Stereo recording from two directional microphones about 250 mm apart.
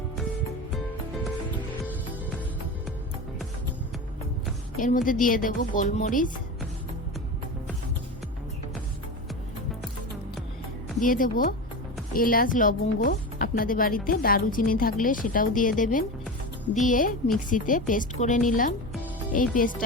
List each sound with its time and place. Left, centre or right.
4.8 s speech: left
11.0 s speech: left